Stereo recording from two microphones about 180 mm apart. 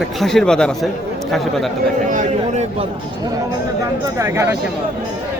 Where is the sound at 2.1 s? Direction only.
40° right (ahead or behind).